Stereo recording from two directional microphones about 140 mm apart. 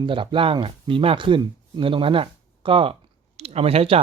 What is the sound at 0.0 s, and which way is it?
Speech, 35° right (ahead or behind).